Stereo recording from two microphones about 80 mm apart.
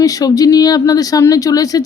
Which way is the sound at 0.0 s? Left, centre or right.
Left.